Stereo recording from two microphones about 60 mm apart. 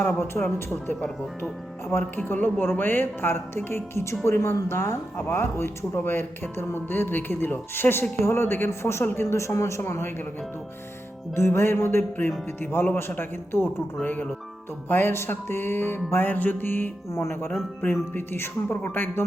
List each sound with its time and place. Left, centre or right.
0.0 s speech: left
1.9 s a man's voice: left
11.3 s a man's voice: left
17.1 s a man's voice: left
18.1 s speech: left